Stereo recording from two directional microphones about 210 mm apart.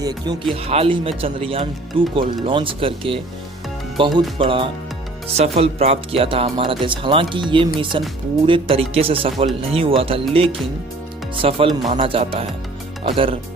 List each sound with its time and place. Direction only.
0.0 s speech: 20° right (ahead or behind)